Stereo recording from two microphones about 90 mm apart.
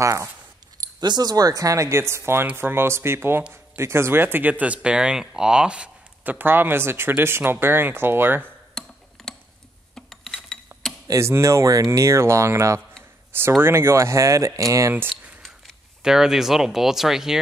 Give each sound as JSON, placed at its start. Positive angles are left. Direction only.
{"t": 0.0, "sound": "speech", "side_deg": -35}
{"t": 1.0, "sound": "speech", "side_deg": -50}
{"t": 8.8, "sound": "a sound", "side_deg": 5}
{"t": 9.9, "sound": "mechanisms", "side_deg": 5}
{"t": 11.1, "sound": "speech", "side_deg": -30}
{"t": 16.0, "sound": "speech", "side_deg": -5}